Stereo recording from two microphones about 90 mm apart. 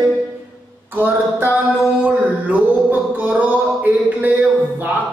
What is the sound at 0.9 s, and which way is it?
Mantra, 20° right (ahead or behind).